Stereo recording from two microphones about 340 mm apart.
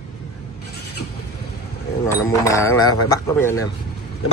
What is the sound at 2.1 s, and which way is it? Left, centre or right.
Speech, centre.